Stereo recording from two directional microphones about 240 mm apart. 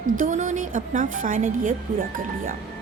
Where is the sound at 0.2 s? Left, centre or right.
Right.